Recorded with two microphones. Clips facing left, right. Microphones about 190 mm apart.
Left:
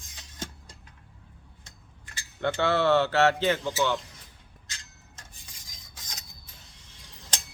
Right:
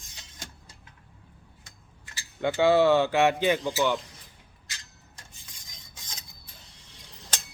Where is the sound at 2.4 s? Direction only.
10° right (ahead or behind).